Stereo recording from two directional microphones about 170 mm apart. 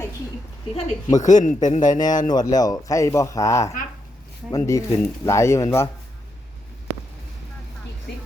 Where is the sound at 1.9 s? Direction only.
25° left (ahead or behind).